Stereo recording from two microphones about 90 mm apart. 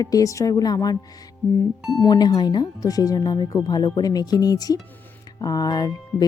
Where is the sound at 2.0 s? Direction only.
45° left (ahead or behind).